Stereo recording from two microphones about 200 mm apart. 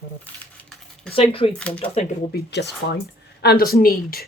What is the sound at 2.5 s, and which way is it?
Speech, 60° left (ahead or behind).